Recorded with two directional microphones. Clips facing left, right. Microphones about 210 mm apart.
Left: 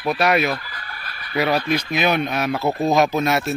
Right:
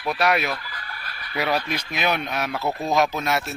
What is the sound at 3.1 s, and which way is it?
Speech, 10° left (ahead or behind).